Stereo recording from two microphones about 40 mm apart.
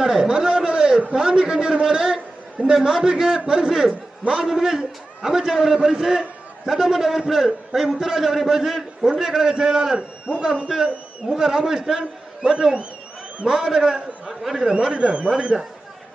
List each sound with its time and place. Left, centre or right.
0.0 s a sound: centre
1.1 s a man's voice: centre
10.7 s a man's voice: centre
15.0 s a man's voice: right